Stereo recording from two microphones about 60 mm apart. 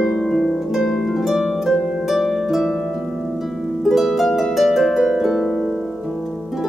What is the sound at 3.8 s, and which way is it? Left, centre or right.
Harp, centre.